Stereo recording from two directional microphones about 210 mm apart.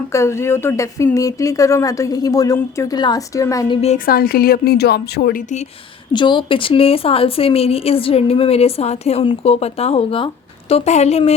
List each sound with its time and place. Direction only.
0.1 s speech: 15° left (ahead or behind)
3.8 s a woman's voice: 35° left (ahead or behind); by 5.4 s 50° left (ahead or behind)
6.1 s a woman's voice: 20° left (ahead or behind)